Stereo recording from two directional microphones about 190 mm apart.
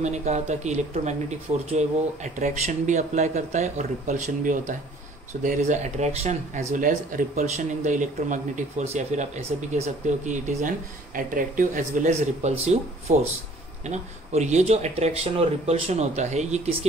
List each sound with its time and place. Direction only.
0.0 s speech: 35° right (ahead or behind)